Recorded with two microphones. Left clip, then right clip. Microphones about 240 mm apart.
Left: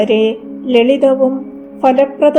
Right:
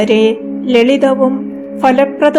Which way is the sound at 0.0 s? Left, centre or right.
Right.